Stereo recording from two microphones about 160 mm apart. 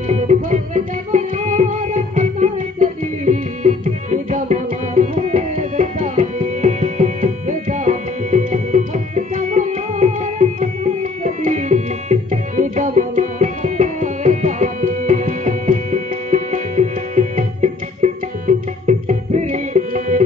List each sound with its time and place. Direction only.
0.1 s music: 50° right (ahead or behind)
18.9 s tabla: 50° right (ahead or behind)